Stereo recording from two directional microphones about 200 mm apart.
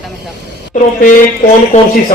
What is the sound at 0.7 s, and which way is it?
Speech, 40° left (ahead or behind).